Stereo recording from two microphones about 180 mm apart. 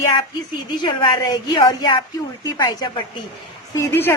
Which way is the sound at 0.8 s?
25° left (ahead or behind).